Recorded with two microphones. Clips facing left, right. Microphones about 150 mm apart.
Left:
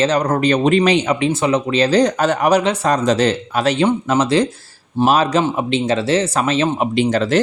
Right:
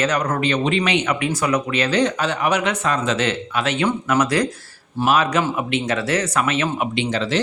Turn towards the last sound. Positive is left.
turn(degrees=45)  # may be behind; listen again after turning